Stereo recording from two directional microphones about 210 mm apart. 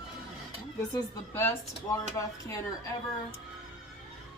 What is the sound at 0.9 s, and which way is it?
Speech, 10° left (ahead or behind).